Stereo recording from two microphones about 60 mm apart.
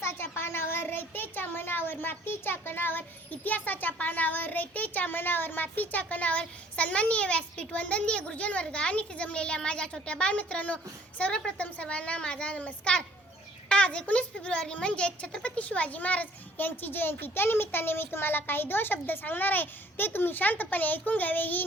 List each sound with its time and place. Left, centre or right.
0.0 s a child's voice: left